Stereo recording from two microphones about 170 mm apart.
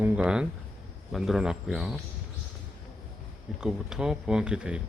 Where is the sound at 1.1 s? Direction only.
Centre (ahead or behind).